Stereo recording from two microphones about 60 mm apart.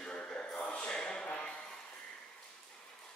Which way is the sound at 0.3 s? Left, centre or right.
Centre.